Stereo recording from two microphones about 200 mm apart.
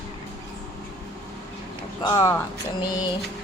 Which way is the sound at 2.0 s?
20° left (ahead or behind).